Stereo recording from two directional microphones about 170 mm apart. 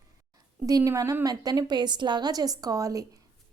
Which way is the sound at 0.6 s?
20° right (ahead or behind).